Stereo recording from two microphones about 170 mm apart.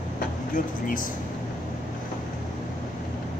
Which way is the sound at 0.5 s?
55° left (ahead or behind).